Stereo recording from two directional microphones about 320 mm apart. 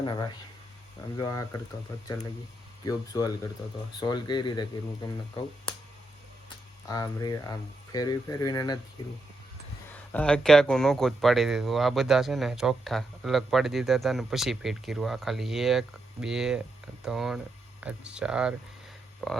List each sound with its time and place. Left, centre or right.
0.0 s speech: centre
2.8 s speech: centre
6.8 s speech: centre
9.9 s speech: centre